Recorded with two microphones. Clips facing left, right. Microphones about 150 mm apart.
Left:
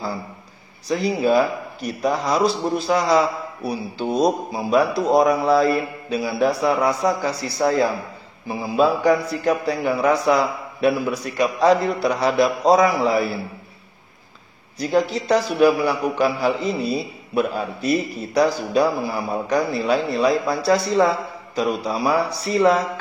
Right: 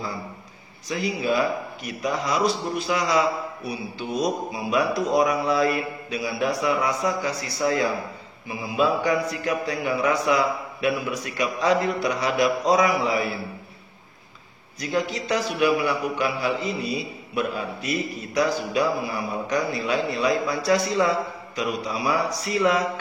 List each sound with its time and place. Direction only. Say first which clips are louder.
0.8 s speech: left 6 dB; 35° left (ahead or behind)
14.8 s speech: left 6 dB; 35° left (ahead or behind)